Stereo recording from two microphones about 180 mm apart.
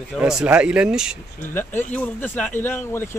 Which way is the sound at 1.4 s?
10° left (ahead or behind).